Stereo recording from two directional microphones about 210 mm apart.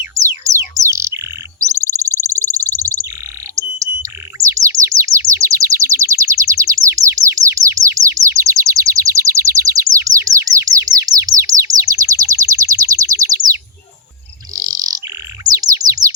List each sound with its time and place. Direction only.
0.0 s music: 15° right (ahead or behind)
1.6 s bird: 15° right (ahead or behind)
4.0 s chirp: 15° right (ahead or behind)
15.4 s bird: 15° right (ahead or behind)